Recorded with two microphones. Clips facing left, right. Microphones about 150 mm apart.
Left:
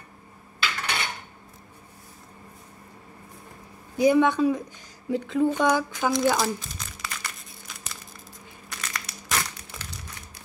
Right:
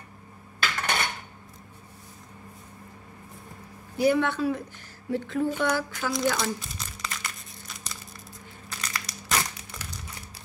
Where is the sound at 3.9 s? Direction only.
15° left (ahead or behind).